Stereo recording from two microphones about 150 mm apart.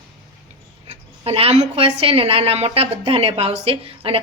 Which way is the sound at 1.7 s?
40° right (ahead or behind).